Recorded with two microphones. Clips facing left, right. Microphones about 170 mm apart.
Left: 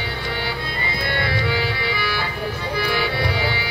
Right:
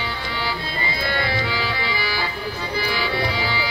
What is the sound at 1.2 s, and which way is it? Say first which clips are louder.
Music: left 2 dB; 60° left (ahead or behind).